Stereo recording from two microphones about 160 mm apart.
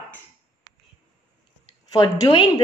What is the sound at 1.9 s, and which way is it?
Speech, 30° left (ahead or behind).